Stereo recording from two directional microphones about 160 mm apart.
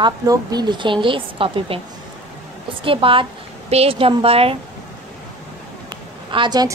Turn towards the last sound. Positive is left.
turn(degrees=-25)  # may be behind; listen again after turning